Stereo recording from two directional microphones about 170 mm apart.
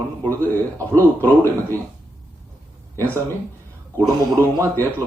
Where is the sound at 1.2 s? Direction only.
15° left (ahead or behind).